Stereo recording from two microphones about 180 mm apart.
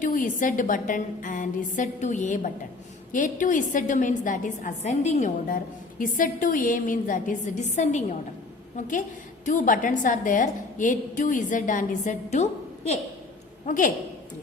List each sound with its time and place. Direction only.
0.0 s a woman's voice: 45° left (ahead or behind)
9.5 s a woman's voice: 45° left (ahead or behind)
13.7 s a woman's voice: 45° left (ahead or behind)